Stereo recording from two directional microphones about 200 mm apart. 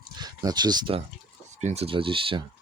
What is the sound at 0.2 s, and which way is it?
Speech, 20° right (ahead or behind).